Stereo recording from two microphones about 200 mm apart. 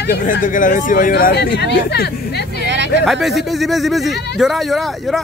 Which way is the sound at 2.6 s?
60° right (ahead or behind).